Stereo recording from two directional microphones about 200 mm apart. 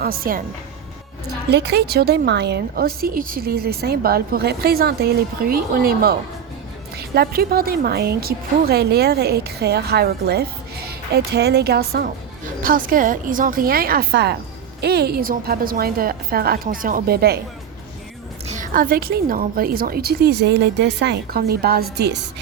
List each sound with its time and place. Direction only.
0.0 s a woman's voice: 45° right (ahead or behind)
1.5 s a woman's voice: 55° right (ahead or behind)
18.4 s a woman's voice: 40° right (ahead or behind); by 22.2 s 55° right (ahead or behind)